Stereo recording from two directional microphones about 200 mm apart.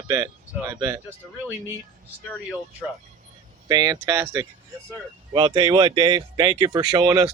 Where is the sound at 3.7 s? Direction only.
20° right (ahead or behind).